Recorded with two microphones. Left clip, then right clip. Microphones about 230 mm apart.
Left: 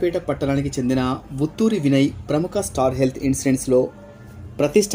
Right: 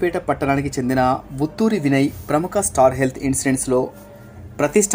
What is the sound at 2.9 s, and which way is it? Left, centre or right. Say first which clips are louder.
Speech: even; right.